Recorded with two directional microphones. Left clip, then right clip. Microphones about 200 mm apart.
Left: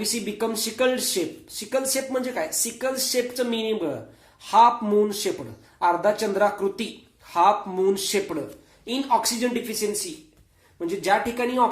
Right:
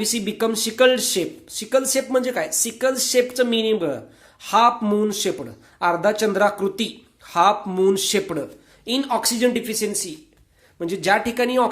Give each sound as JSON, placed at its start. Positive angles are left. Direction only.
{"t": 0.0, "sound": "speech", "side_deg": -40}